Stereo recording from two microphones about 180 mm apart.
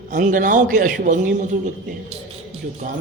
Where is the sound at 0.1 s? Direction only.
45° right (ahead or behind).